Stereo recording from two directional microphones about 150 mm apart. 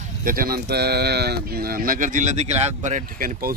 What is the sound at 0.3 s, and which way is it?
Speech, 75° right (ahead or behind).